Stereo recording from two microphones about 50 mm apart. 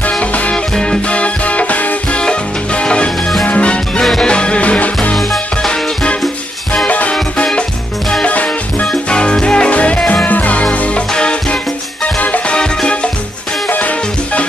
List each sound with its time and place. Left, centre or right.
0.2 s music: left
5.1 s music: centre
6.9 s music: left
8.8 s music: centre
10.2 s music: left
12.2 s music: left
12.5 s music: centre
13.7 s music: left